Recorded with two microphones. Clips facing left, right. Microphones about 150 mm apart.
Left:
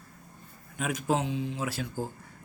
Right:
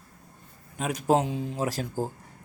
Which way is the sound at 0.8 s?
35° right (ahead or behind).